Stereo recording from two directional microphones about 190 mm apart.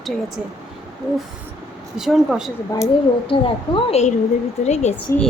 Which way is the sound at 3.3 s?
30° left (ahead or behind).